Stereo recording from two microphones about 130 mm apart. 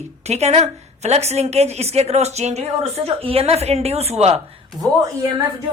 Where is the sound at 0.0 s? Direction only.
55° right (ahead or behind).